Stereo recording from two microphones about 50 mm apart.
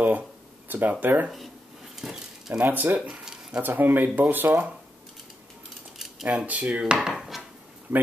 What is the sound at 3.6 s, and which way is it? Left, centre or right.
Speech, right.